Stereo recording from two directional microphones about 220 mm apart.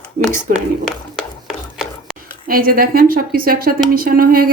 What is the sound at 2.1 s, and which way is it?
Speech, 40° right (ahead or behind).